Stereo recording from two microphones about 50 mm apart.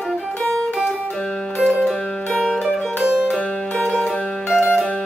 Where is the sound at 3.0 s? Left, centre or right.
Centre.